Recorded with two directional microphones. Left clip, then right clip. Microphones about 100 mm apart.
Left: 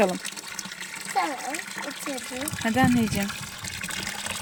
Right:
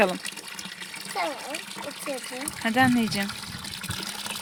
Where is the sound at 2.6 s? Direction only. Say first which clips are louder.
Right 1 dB; 25° left (ahead or behind).